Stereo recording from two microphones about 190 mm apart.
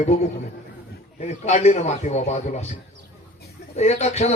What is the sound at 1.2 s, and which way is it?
A man's voice, 35° left (ahead or behind).